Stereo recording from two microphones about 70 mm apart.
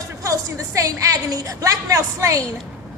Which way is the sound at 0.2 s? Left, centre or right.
Right.